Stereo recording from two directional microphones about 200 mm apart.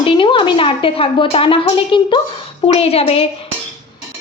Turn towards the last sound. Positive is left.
turn(degrees=30)  # may be behind; listen again after turning